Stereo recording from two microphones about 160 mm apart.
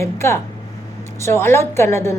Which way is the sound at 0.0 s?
15° left (ahead or behind).